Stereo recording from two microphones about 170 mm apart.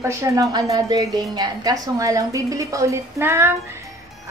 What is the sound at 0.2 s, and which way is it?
A woman's voice, 20° right (ahead or behind).